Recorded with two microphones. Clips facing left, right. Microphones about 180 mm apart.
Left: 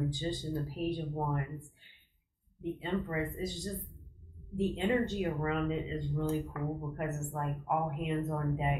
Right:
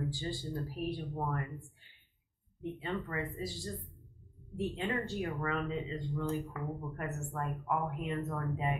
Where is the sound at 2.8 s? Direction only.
20° left (ahead or behind).